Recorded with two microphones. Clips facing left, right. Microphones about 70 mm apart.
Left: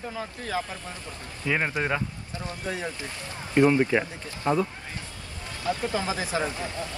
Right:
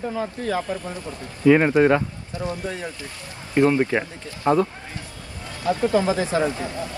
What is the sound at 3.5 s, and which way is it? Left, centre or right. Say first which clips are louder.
Speech: right 2 dB; right.